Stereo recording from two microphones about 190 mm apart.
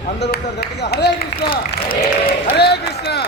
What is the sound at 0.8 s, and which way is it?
Speech, 60° left (ahead or behind).